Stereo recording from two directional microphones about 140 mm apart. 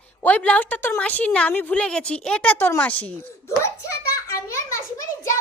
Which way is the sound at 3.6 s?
20° left (ahead or behind).